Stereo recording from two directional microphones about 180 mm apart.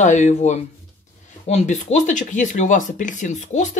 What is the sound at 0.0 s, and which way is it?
Speech, 40° left (ahead or behind).